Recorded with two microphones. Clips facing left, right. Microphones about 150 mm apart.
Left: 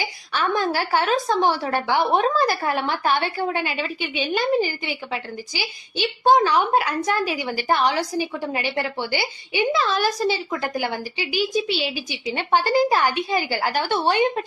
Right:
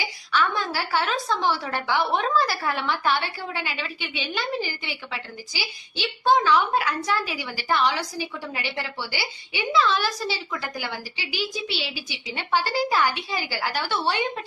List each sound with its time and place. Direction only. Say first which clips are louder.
0.0 s a woman's voice: even; 50° left (ahead or behind)